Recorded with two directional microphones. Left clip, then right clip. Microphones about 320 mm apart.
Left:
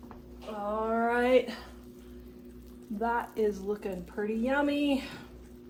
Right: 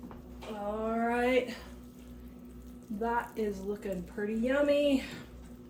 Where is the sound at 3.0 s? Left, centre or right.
Centre.